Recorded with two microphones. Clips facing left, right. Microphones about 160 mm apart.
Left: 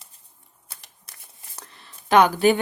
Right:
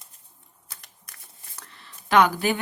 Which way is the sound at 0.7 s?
25° left (ahead or behind).